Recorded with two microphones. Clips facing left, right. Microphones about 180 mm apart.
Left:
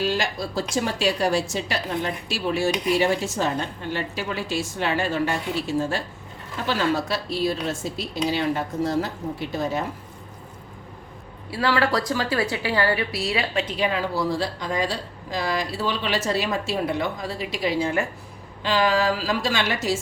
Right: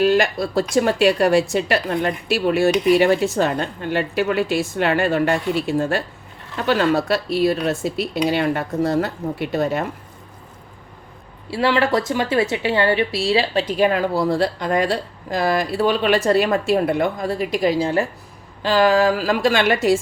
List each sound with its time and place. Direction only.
0.0 s speech: 60° right (ahead or behind)
11.5 s a woman's voice: 25° right (ahead or behind)
18.6 s speech: 45° right (ahead or behind)